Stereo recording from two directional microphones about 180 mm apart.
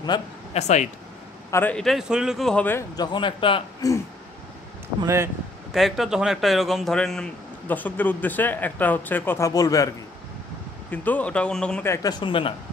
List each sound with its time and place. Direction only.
0.1 s a man's voice: 25° left (ahead or behind)
0.5 s speech: 40° left (ahead or behind)
1.5 s a man's voice: 10° left (ahead or behind)
3.0 s a man's voice: 25° left (ahead or behind)
5.0 s speech: 15° right (ahead or behind)
5.7 s a man's voice: centre (ahead or behind); by 9.8 s 20° left (ahead or behind)
10.9 s a man's voice: 10° left (ahead or behind); by 12.5 s 30° left (ahead or behind)